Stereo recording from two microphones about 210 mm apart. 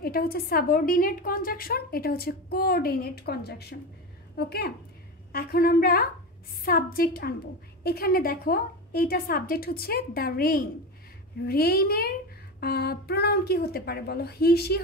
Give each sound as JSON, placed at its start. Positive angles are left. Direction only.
{"t": 0.0, "sound": "a woman's voice", "side_deg": 45}